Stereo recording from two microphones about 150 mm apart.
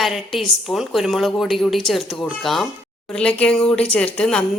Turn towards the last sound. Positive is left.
turn(degrees=5)  # may be behind; listen again after turning